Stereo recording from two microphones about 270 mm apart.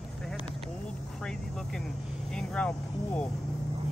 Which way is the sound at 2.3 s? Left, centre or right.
Centre.